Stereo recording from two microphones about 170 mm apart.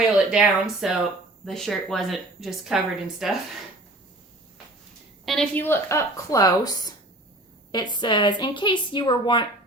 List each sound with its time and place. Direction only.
0.0 s a woman's voice: 5° right (ahead or behind)
5.2 s a woman's voice: centre (ahead or behind)
5.6 s a woman's voice: 15° left (ahead or behind)